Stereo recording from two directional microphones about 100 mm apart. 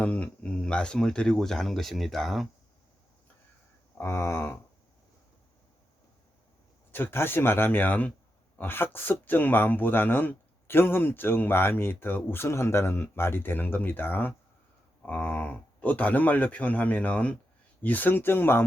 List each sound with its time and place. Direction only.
0.0 s speech: 15° left (ahead or behind)
3.9 s a man's voice: 25° left (ahead or behind)
6.9 s a man's voice: 25° left (ahead or behind)